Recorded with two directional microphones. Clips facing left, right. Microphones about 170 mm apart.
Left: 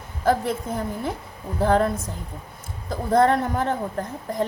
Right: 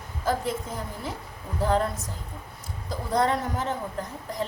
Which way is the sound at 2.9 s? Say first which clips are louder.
Left 6 dB; 55° left (ahead or behind).